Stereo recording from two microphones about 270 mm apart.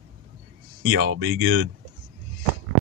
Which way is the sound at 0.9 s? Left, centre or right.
Right.